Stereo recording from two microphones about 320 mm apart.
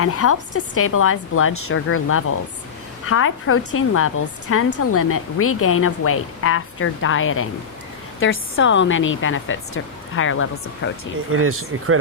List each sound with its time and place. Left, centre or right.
0.0 s a woman's voice: left
11.3 s speech: right